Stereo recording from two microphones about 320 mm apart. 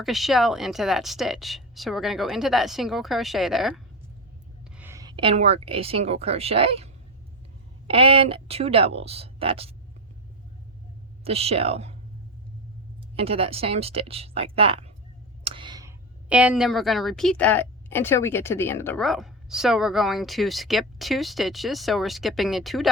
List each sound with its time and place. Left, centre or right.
0.0 s a woman's voice: centre
4.8 s a woman's voice: centre
11.2 s speech: centre
13.1 s a woman's voice: centre